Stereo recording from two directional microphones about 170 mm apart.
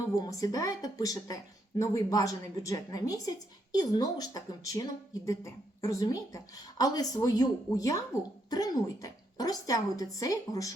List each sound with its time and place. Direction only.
0.2 s a woman's voice: 20° left (ahead or behind)